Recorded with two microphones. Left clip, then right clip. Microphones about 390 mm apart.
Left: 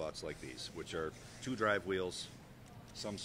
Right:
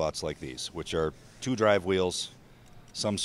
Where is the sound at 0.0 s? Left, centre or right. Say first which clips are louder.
Right 11 dB; right.